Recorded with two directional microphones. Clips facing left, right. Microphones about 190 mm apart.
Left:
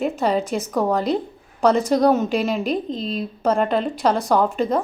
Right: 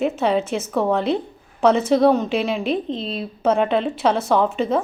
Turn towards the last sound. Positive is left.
turn(degrees=0)  # may be behind; listen again after turning